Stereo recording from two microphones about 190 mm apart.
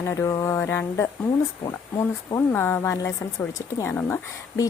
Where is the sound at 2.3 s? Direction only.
10° left (ahead or behind).